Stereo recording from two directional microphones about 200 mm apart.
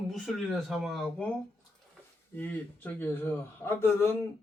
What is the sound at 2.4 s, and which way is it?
A man's voice, 10° left (ahead or behind).